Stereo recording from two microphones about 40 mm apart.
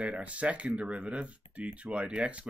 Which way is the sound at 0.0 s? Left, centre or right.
Right.